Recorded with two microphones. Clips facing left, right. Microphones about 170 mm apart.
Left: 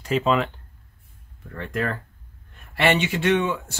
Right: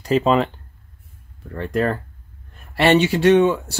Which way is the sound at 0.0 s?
35° right (ahead or behind).